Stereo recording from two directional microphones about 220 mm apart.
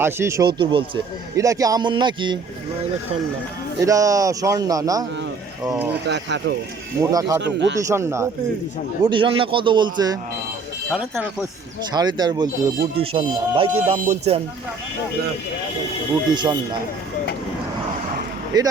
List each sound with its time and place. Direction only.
0.0 s a man's voice: 10° right (ahead or behind)
3.8 s a man's voice: 15° right (ahead or behind)
5.9 s speech: 50° right (ahead or behind)
7.0 s a man's voice: 15° right (ahead or behind)
7.4 s speech: 55° right (ahead or behind)
7.9 s a man's voice: 15° right (ahead or behind)
10.9 s speech: 5° right (ahead or behind)
11.9 s a man's voice: 20° right (ahead or behind)
16.3 s a man's voice: 20° right (ahead or behind)
18.5 s a man's voice: 20° right (ahead or behind)